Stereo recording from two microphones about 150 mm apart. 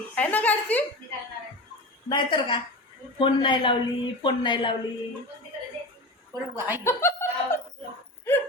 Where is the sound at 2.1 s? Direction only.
35° left (ahead or behind).